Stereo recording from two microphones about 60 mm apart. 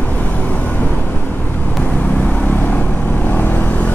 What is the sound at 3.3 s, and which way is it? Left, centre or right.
Vehicle, left.